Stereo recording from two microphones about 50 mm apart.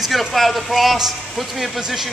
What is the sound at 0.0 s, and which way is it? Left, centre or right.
A man's voice, centre.